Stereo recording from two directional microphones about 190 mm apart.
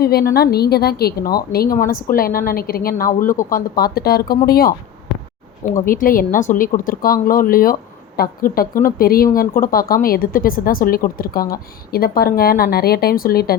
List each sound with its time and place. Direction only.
0.0 s a woman's voice: 55° left (ahead or behind)
5.8 s a woman's voice: 45° left (ahead or behind)